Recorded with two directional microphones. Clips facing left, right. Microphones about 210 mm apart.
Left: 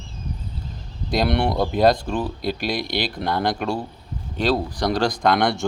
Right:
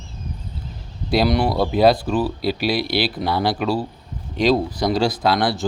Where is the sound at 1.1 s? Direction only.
5° right (ahead or behind).